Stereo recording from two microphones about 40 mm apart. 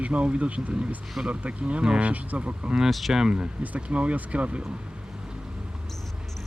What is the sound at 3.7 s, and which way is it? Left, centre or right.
Speech, right.